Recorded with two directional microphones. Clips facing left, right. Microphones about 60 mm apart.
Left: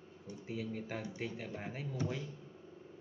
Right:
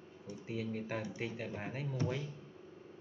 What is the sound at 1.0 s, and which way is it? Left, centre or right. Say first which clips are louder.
Speech: right 1 dB; centre.